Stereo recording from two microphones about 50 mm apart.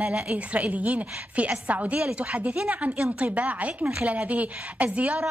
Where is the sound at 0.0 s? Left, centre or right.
Right.